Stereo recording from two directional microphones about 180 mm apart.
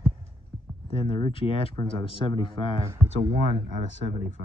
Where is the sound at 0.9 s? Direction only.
25° left (ahead or behind).